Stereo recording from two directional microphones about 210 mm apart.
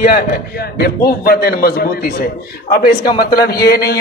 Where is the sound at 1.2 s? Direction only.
45° left (ahead or behind).